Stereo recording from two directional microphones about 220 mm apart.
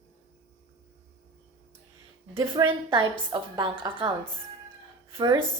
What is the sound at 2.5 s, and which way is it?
A woman's voice, 20° right (ahead or behind).